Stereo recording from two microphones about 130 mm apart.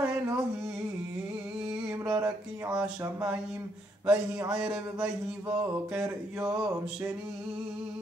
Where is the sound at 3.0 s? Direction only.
25° right (ahead or behind).